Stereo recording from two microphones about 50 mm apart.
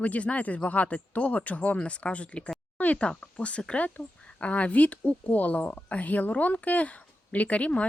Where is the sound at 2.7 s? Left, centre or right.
Left.